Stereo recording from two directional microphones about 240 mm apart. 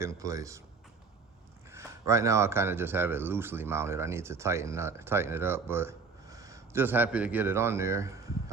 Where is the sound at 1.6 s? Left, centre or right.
Centre.